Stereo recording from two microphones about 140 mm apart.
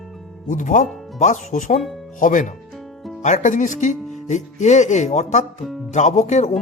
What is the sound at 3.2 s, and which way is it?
Speech, 60° left (ahead or behind).